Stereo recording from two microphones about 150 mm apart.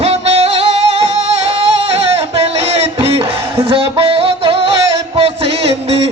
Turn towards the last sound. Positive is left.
turn(degrees=-40)  # may be behind; listen again after turning